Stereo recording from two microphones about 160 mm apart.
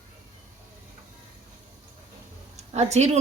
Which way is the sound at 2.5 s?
45° right (ahead or behind).